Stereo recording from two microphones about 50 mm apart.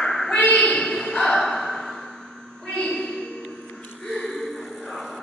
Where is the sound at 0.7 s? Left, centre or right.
Centre.